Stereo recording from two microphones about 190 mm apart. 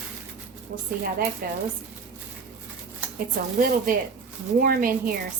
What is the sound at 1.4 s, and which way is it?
Speech, 50° right (ahead or behind).